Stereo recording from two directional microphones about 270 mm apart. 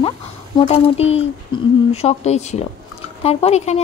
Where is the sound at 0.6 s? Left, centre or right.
Left.